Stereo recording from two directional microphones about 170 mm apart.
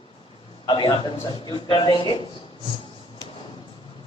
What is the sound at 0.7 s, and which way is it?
A man's voice, 25° left (ahead or behind).